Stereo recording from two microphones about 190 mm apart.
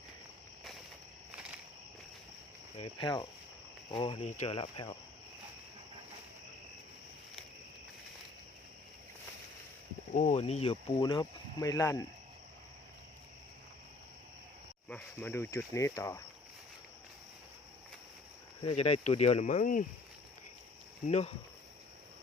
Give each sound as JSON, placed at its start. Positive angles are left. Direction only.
{"t": 1.3, "sound": "cricket", "side_deg": -5}
{"t": 2.7, "sound": "speech", "side_deg": 25}
{"t": 10.2, "sound": "speech", "side_deg": 40}
{"t": 14.8, "sound": "speech", "side_deg": 5}
{"t": 18.6, "sound": "speech", "side_deg": 35}
{"t": 21.1, "sound": "speech", "side_deg": 30}